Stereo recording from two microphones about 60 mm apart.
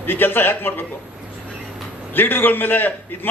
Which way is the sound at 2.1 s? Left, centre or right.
Left.